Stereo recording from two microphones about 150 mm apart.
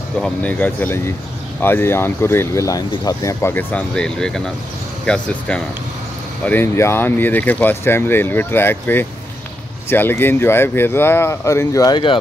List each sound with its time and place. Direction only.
0.2 s speech: 10° left (ahead or behind); by 12.2 s 30° left (ahead or behind)